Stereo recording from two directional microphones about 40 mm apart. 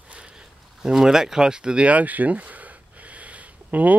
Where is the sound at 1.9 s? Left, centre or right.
Right.